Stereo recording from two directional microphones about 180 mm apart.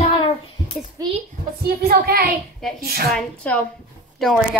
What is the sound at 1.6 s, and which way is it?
Speech, 55° right (ahead or behind).